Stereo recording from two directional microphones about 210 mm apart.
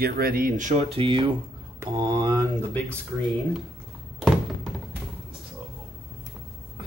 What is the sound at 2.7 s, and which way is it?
Speech, 10° left (ahead or behind).